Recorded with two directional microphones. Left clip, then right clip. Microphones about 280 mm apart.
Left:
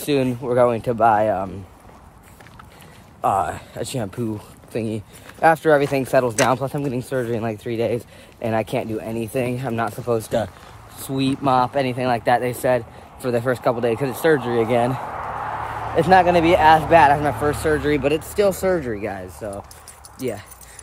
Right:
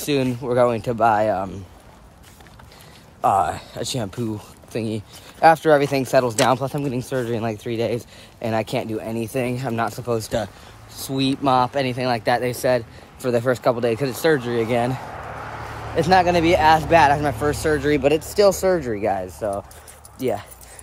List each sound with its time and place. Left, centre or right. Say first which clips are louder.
0.0 s speech: left 1 dB; centre
3.2 s speech: right 2 dB; centre
15.0 s a sound: left 5 dB; left
16.0 s speech: left 2 dB; centre